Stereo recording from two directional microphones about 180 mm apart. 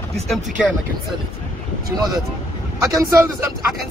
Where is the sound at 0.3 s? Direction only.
Centre (ahead or behind).